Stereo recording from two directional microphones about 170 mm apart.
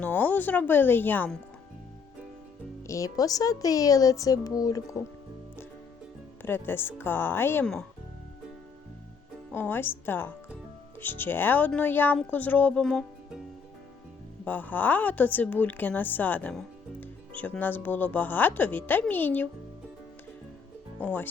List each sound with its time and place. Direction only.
0.0 s a woman's voice: 10° left (ahead or behind)
2.8 s speech: 20° left (ahead or behind)
6.4 s a woman's voice: 15° left (ahead or behind)
9.5 s a woman's voice: 10° left (ahead or behind)
14.4 s a woman's voice: 10° left (ahead or behind)
21.0 s a woman's voice: 10° left (ahead or behind)